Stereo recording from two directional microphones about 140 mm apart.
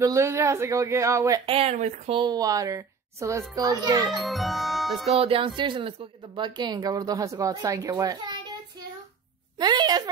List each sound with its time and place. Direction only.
0.0 s a child's voice: 20° right (ahead or behind)
1.4 s speech: 45° right (ahead or behind)
2.1 s a child's voice: 30° right (ahead or behind)
4.1 s speech: centre (ahead or behind)
5.0 s a woman's voice: 45° right (ahead or behind); by 8.4 s 25° right (ahead or behind)
9.6 s speech: 30° right (ahead or behind)